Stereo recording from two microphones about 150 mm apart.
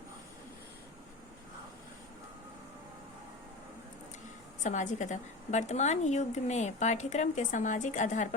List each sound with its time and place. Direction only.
4.6 s a woman's voice: 55° left (ahead or behind)